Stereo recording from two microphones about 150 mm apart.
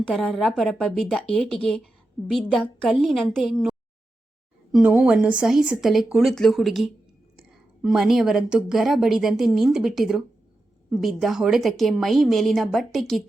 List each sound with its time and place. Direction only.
0.0 s a woman's voice: 5° left (ahead or behind)